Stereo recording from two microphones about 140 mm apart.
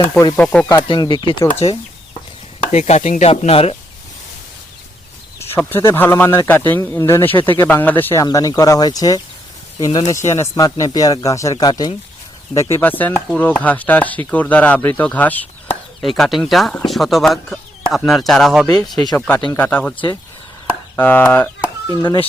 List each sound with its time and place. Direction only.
0.0 s speech: 20° left (ahead or behind)
0.6 s speech: 20° left (ahead or behind)
0.9 s speech: 35° left (ahead or behind)
1.5 s sizzle: 45° left (ahead or behind)
5.4 s speech: 15° left (ahead or behind)
8.2 s speech: 25° left (ahead or behind)
10.1 s speech: 20° left (ahead or behind)
12.5 s speech: 20° left (ahead or behind)
16.0 s speech: centre (ahead or behind)
20.9 s speech: 10° left (ahead or behind)
22.0 s speech: 30° left (ahead or behind)